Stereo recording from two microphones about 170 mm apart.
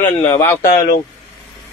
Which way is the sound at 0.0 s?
15° left (ahead or behind).